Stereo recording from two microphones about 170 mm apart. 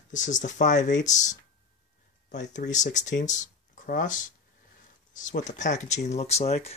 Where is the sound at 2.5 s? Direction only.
45° left (ahead or behind).